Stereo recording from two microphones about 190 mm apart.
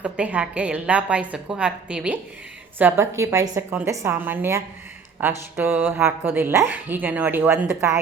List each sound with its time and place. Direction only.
0.0 s speech: 5° right (ahead or behind)